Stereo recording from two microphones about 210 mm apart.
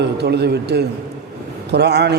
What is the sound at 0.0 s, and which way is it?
A man's voice, 50° right (ahead or behind).